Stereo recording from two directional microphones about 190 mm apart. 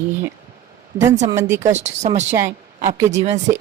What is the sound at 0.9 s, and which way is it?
Speech, 15° right (ahead or behind).